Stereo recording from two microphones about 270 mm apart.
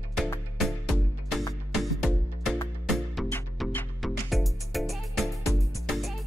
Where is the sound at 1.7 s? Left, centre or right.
Centre.